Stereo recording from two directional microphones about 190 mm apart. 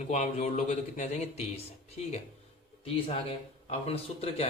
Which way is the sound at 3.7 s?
30° left (ahead or behind).